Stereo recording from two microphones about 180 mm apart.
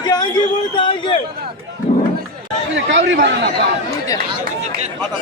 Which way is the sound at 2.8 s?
85° right.